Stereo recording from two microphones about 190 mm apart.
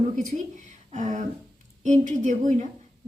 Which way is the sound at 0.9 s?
40° right (ahead or behind).